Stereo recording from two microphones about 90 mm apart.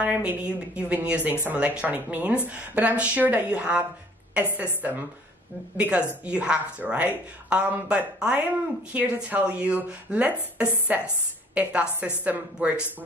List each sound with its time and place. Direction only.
0.0 s speech: 15° right (ahead or behind)
4.8 s speech: 15° right (ahead or behind)